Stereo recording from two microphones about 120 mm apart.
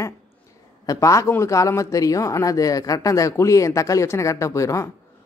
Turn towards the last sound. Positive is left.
turn(degrees=25)  # may be behind; listen again after turning